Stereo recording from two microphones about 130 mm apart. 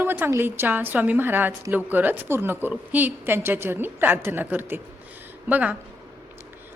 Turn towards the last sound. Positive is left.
turn(degrees=-10)  # may be behind; listen again after turning